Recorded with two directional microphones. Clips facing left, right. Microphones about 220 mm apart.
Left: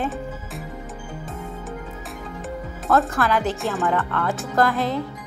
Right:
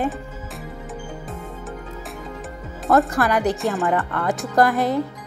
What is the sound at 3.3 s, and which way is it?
Speech, 15° right (ahead or behind).